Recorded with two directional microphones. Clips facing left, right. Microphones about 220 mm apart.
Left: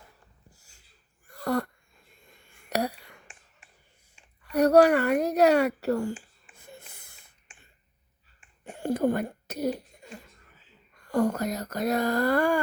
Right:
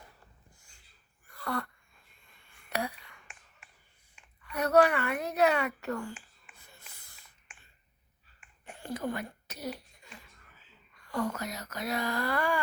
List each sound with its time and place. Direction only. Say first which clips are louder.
1.3 s a sound: left 8 dB; 40° left (ahead or behind)
4.1 s speech: left 10 dB; 40° left (ahead or behind)
6.6 s wheeze: left 12 dB; 50° left (ahead or behind)
8.6 s a sound: left 10 dB; 45° left (ahead or behind)
9.0 s speech: left 9 dB; 50° left (ahead or behind)
10.9 s speech: left 8 dB; 45° left (ahead or behind)